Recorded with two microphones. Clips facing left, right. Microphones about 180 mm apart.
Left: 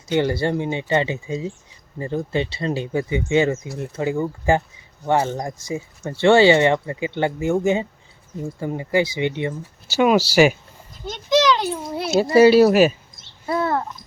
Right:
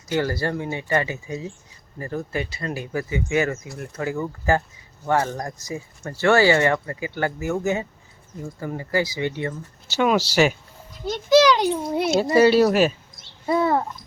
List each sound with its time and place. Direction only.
0.1 s speech: 25° left (ahead or behind)
9.9 s speech: 10° left (ahead or behind)
11.3 s a sound: 10° right (ahead or behind)
12.1 s speech: 5° left (ahead or behind)
13.5 s babbling: 15° right (ahead or behind)